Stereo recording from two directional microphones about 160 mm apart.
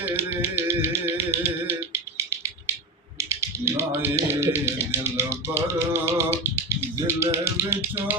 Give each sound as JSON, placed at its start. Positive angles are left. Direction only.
{"t": 0.0, "sound": "music", "side_deg": -15}
{"t": 3.2, "sound": "music", "side_deg": -15}